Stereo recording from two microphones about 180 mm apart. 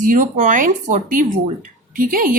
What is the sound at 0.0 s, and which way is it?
A woman's voice, 45° right (ahead or behind).